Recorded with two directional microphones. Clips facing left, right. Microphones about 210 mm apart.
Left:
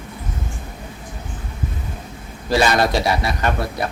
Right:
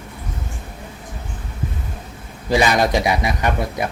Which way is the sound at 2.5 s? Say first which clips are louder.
Even; 15° right (ahead or behind).